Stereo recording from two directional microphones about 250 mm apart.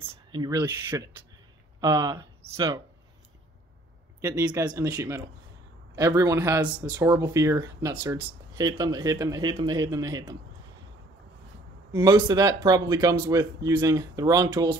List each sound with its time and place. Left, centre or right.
0.0 s speech: centre
4.2 s speech: centre
11.9 s speech: centre